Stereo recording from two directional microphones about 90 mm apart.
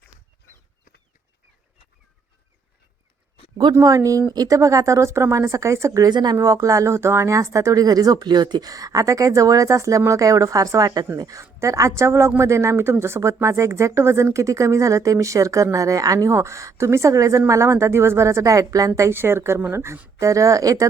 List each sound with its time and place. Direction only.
3.8 s speech: 40° right (ahead or behind)
6.1 s speech: 55° right (ahead or behind)
6.3 s speech: 35° right (ahead or behind)